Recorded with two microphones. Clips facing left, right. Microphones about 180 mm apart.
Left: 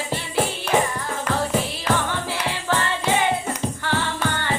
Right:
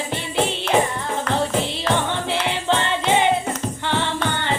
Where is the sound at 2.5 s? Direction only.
20° right (ahead or behind).